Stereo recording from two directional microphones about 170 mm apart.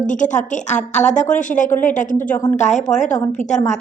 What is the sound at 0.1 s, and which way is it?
A woman's voice, 45° left (ahead or behind).